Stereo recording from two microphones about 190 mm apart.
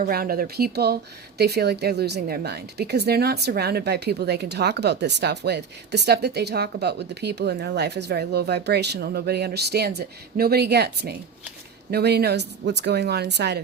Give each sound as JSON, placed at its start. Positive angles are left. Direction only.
{"t": 0.0, "sound": "a woman's voice", "side_deg": -50}